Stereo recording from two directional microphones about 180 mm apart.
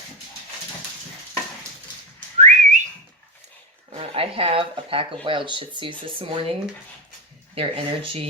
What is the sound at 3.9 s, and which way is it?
Speech, 30° right (ahead or behind).